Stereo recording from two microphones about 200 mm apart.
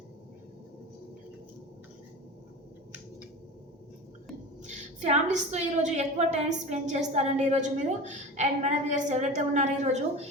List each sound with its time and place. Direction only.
4.6 s a woman's voice: 35° right (ahead or behind)